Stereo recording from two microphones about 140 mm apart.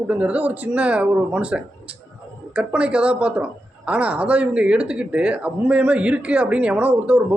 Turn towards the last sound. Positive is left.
turn(degrees=-10)  # may be behind; listen again after turning